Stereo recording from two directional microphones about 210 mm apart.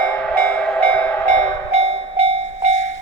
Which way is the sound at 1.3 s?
30° right (ahead or behind).